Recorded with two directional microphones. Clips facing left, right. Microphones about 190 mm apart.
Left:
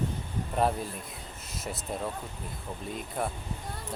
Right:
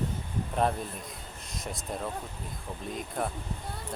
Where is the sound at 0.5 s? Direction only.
5° left (ahead or behind).